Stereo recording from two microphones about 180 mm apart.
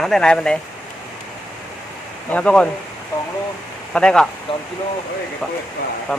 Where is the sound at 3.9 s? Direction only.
5° left (ahead or behind).